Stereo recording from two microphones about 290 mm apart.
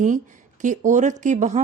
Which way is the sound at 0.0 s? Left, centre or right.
Right.